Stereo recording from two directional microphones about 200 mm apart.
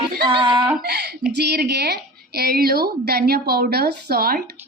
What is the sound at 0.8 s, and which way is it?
A woman's voice, 55° right (ahead or behind).